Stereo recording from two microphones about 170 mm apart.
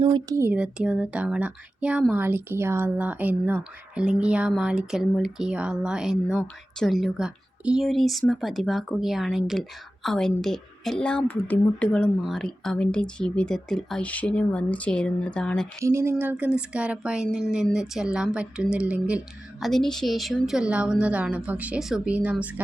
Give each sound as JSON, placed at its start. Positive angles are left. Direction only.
{"t": 0.0, "sound": "speech", "side_deg": -30}
{"t": 0.3, "sound": "speech", "side_deg": -10}
{"t": 15.8, "sound": "speech", "side_deg": -15}